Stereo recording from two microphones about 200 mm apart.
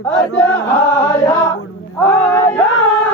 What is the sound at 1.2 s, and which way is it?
Chant, 20° left (ahead or behind).